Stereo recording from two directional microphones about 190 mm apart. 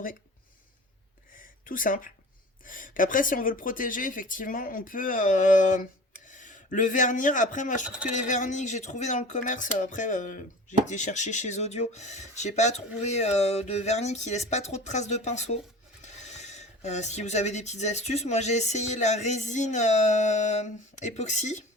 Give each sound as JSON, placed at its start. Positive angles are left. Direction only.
{"t": 1.4, "sound": "a sound", "side_deg": 45}
{"t": 2.6, "sound": "speech", "side_deg": 45}
{"t": 7.9, "sound": "speech", "side_deg": -5}
{"t": 8.3, "sound": "speech", "side_deg": 40}